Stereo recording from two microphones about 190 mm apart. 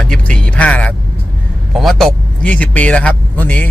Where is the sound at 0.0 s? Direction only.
5° left (ahead or behind).